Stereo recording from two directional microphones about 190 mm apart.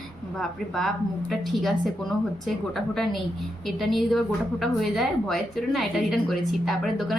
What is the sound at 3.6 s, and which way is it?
A woman's voice, centre (ahead or behind).